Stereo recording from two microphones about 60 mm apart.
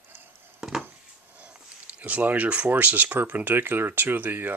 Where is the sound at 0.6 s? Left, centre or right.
Centre.